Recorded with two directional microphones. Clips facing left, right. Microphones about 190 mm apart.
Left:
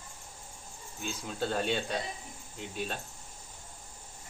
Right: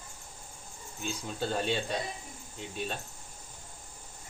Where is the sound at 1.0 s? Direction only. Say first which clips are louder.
Even; centre (ahead or behind).